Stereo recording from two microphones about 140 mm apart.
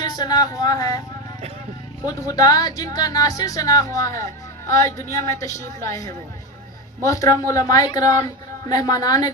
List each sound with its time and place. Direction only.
0.0 s speech: 30° left (ahead or behind)
2.0 s speech: 25° left (ahead or behind)